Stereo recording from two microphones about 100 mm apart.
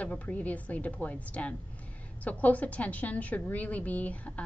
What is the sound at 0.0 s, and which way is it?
A woman's voice, 15° left (ahead or behind).